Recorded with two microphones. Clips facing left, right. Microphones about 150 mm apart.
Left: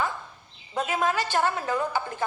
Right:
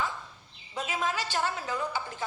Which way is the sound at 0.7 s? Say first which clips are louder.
Left 6 dB; 55° left (ahead or behind).